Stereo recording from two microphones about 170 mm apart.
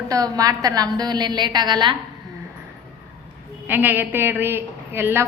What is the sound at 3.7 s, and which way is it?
A woman's voice, 10° right (ahead or behind).